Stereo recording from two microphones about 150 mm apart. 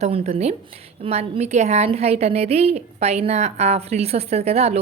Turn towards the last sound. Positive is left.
turn(degrees=-45)  # may be behind; listen again after turning